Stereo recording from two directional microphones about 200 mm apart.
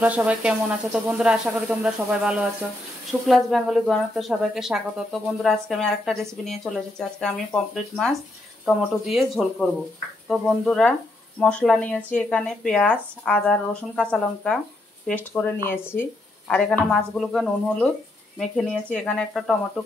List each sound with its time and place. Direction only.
0.0 s a woman's voice: 5° right (ahead or behind)